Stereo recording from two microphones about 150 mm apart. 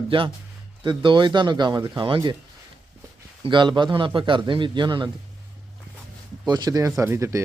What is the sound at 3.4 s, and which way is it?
Speech, 30° right (ahead or behind).